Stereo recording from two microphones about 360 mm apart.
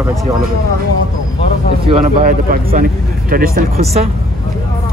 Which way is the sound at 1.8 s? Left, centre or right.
Centre.